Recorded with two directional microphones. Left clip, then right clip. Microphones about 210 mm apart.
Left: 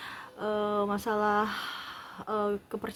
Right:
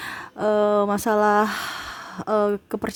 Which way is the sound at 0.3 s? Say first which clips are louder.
Right 11 dB; 55° right (ahead or behind).